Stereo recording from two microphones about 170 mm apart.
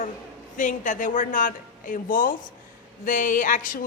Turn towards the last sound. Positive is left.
turn(degrees=50)  # may be behind; listen again after turning